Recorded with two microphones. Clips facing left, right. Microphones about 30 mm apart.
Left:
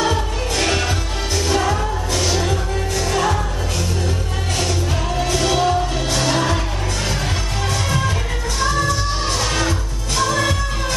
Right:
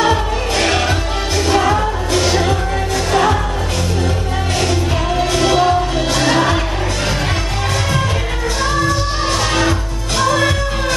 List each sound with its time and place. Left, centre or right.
0.0 s music: right
5.1 s music: right
8.6 s music: centre